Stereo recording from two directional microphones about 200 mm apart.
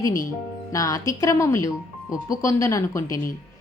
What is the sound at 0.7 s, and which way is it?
Speech, 15° left (ahead or behind).